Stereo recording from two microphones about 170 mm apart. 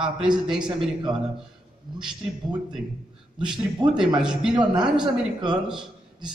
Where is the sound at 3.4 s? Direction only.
5° right (ahead or behind).